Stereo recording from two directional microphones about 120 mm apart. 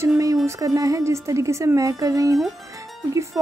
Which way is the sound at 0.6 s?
30° right (ahead or behind).